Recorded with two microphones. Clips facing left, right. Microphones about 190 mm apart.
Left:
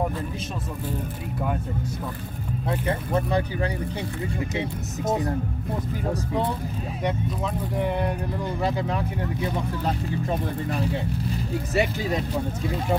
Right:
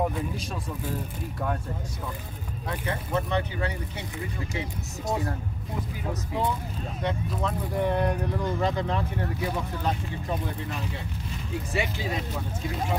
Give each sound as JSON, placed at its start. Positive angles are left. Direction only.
{"t": 7.2, "sound": "speech", "side_deg": 0}
{"t": 11.7, "sound": "speech", "side_deg": 40}